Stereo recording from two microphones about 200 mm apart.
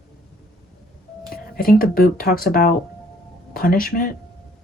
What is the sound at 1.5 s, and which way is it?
Speech, 45° left (ahead or behind).